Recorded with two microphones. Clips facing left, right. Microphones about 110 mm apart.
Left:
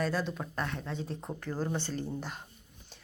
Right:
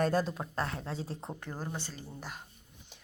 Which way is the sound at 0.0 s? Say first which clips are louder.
Right 3 dB; 45° right (ahead or behind).